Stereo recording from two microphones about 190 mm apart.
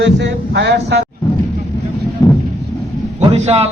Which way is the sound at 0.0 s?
65° right (ahead or behind).